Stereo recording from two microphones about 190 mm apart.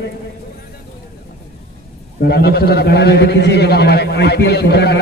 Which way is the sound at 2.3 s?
60° left (ahead or behind).